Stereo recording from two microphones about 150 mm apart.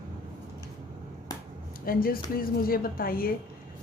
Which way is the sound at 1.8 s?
75° left (ahead or behind).